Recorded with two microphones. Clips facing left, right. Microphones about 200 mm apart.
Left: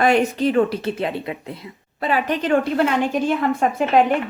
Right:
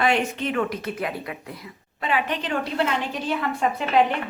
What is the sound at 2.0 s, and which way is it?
A woman's voice, 40° left (ahead or behind).